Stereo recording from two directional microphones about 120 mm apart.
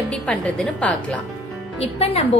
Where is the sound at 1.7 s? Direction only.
55° left (ahead or behind).